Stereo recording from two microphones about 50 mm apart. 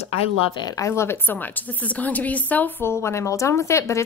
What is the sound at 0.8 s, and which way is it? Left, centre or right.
A woman's voice, left.